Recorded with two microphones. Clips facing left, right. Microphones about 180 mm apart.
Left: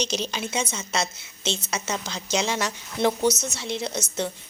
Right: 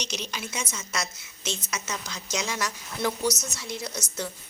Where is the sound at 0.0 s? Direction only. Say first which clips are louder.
Left 7 dB; 30° left (ahead or behind).